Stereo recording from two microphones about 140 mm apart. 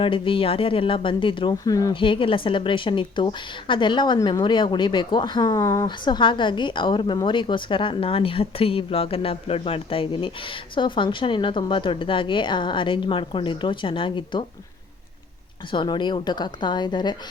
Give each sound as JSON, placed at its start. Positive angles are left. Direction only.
{"t": 0.0, "sound": "speech", "side_deg": 40}
{"t": 1.9, "sound": "speech", "side_deg": 40}
{"t": 15.7, "sound": "speech", "side_deg": 35}